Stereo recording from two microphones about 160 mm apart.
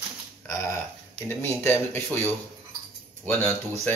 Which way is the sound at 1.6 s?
15° left (ahead or behind).